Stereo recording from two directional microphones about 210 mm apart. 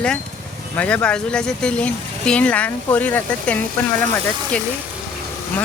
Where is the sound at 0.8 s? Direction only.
5° left (ahead or behind).